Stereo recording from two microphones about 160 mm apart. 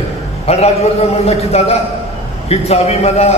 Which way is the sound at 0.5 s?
40° left (ahead or behind).